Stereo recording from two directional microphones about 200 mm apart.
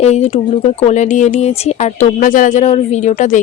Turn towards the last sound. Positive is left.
turn(degrees=35)  # may be behind; listen again after turning